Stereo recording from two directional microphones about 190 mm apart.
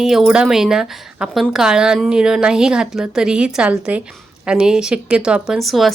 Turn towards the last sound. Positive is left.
turn(degrees=0)  # may be behind; listen again after turning